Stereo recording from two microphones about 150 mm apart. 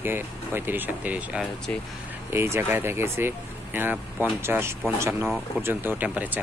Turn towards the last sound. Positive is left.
turn(degrees=-10)  # may be behind; listen again after turning